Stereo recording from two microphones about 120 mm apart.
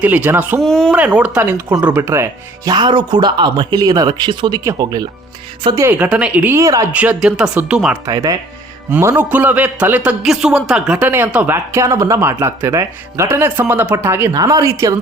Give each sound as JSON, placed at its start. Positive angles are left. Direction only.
{"t": 0.0, "sound": "a man's voice", "side_deg": -15}
{"t": 0.6, "sound": "speech", "side_deg": 5}
{"t": 0.9, "sound": "a man's voice", "side_deg": -10}
{"t": 2.7, "sound": "speech", "side_deg": -40}
{"t": 5.9, "sound": "a man's voice", "side_deg": -10}
{"t": 6.6, "sound": "speech", "side_deg": -30}
{"t": 6.9, "sound": "a man's voice", "side_deg": -10}
{"t": 8.0, "sound": "speech", "side_deg": -30}
{"t": 8.9, "sound": "a man's voice", "side_deg": -20}